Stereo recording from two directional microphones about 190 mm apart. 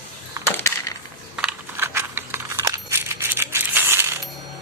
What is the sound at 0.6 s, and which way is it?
Coin, 15° left (ahead or behind).